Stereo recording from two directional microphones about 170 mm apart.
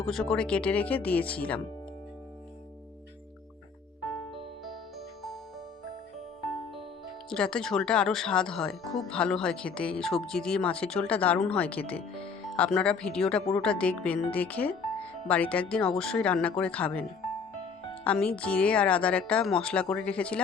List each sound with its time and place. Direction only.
0.0 s speech: centre (ahead or behind)
7.3 s speech: 5° left (ahead or behind)